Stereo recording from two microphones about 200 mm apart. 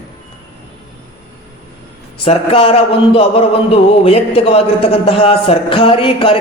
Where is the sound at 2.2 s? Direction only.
30° left (ahead or behind).